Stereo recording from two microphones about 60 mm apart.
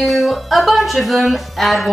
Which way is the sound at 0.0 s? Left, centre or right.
Centre.